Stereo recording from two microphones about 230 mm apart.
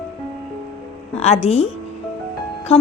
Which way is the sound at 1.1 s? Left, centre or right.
Left.